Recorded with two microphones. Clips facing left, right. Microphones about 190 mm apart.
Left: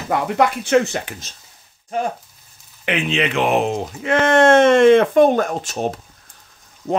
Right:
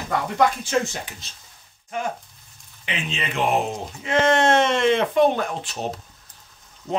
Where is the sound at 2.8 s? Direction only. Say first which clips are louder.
Left 9 dB; 70° left (ahead or behind); by 5.9 s 45° left (ahead or behind).